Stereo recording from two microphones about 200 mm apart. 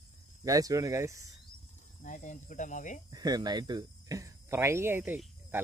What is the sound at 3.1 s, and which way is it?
Speech, 20° right (ahead or behind).